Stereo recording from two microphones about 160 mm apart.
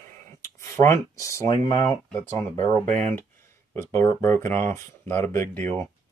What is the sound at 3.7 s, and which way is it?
Speech, 15° left (ahead or behind).